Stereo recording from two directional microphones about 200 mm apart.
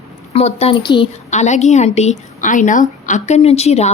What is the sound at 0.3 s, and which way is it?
Speech, 30° left (ahead or behind).